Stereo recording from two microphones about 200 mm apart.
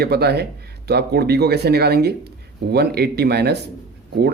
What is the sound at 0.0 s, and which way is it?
Speech, 55° right (ahead or behind).